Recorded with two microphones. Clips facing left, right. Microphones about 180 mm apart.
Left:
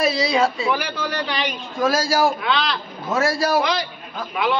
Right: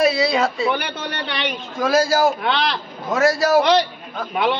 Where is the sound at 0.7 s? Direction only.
70° right (ahead or behind).